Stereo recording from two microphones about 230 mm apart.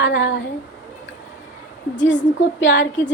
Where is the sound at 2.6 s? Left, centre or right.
Left.